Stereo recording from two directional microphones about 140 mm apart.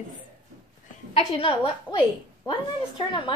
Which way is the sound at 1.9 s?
30° left (ahead or behind).